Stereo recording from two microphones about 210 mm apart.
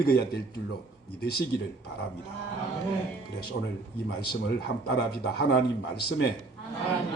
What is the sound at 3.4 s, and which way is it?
Speech, 55° left (ahead or behind).